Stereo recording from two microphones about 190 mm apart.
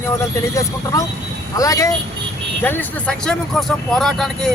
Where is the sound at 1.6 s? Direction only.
15° left (ahead or behind); by 4.5 s centre (ahead or behind).